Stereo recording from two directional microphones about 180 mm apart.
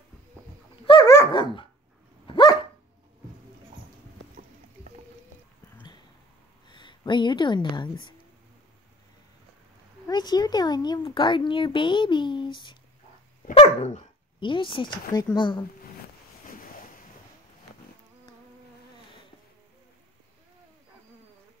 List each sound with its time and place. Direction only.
0.8 s dog: 20° left (ahead or behind)
6.7 s speech: 25° left (ahead or behind)
10.0 s speech: 20° left (ahead or behind)